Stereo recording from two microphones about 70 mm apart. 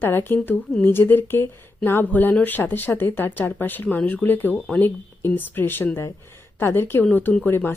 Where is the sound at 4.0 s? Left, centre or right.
Centre.